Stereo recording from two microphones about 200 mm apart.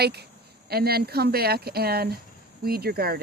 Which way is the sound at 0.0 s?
55° right (ahead or behind).